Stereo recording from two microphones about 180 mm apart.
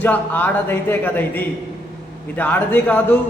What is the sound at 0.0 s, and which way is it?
A woman's voice, 10° left (ahead or behind).